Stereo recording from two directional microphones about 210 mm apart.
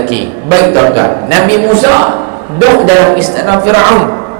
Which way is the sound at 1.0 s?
30° right (ahead or behind).